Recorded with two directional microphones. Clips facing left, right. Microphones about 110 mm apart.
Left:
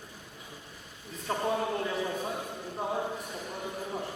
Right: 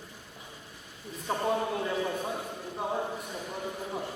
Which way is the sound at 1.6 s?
Centre (ahead or behind).